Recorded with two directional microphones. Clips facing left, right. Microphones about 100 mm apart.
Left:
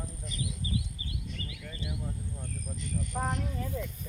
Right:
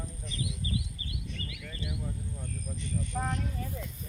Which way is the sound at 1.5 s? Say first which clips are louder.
Even; 25° left (ahead or behind).